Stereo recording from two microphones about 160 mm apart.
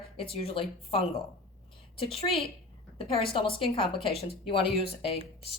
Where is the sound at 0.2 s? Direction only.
35° left (ahead or behind).